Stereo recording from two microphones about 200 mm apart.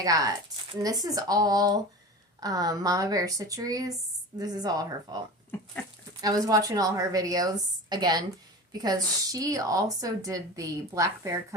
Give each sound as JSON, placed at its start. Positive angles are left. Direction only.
{"t": 0.0, "sound": "speech", "side_deg": -15}
{"t": 6.2, "sound": "a woman's voice", "side_deg": -15}